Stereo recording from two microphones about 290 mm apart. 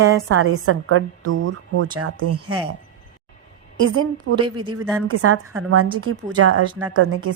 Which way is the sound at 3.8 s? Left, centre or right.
Right.